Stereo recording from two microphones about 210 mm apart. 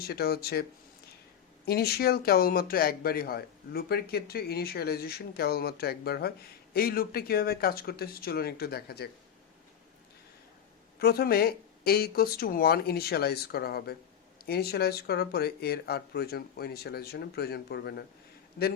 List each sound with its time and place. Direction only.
0.0 s speech: 50° left (ahead or behind)
1.6 s speech: 50° left (ahead or behind)
11.0 s speech: 50° left (ahead or behind)